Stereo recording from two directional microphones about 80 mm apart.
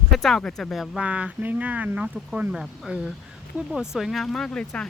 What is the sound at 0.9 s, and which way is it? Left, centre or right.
Speech, centre.